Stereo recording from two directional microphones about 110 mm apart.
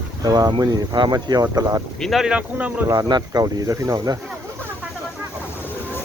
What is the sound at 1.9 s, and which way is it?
Speech, centre (ahead or behind).